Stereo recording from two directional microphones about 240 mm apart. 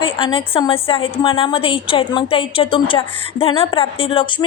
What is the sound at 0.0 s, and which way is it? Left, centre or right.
A woman's voice, left.